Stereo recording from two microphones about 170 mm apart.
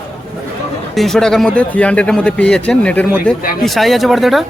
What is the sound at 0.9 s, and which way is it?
Speech, centre (ahead or behind).